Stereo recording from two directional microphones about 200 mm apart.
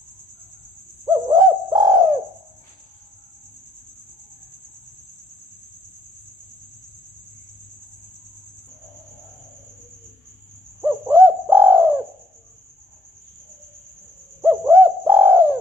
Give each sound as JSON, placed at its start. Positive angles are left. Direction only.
{"t": 1.1, "sound": "bird", "side_deg": -20}
{"t": 10.8, "sound": "bird", "side_deg": -10}
{"t": 14.4, "sound": "bird", "side_deg": -15}